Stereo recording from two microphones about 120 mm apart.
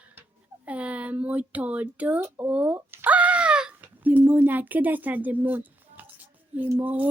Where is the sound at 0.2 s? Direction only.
10° right (ahead or behind).